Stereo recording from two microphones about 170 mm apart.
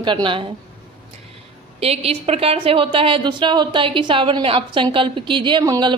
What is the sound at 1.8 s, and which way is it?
A woman's voice, 35° right (ahead or behind).